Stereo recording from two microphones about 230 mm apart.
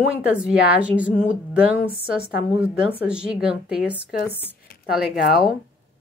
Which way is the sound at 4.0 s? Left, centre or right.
Left.